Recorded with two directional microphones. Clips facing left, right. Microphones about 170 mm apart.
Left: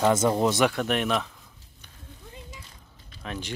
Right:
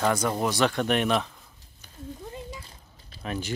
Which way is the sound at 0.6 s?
5° left (ahead or behind).